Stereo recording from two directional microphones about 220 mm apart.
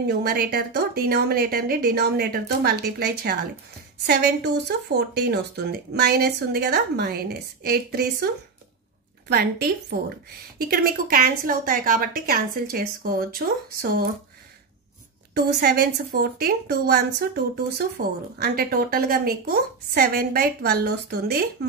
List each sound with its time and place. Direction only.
0.0 s speech: 45° right (ahead or behind)
9.3 s a woman's voice: 45° right (ahead or behind)
15.3 s speech: 45° right (ahead or behind)